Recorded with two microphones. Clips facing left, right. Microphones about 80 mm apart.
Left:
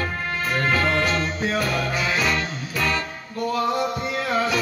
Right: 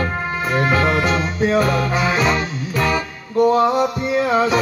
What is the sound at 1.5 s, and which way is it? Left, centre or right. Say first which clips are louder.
Music: right 7 dB; right.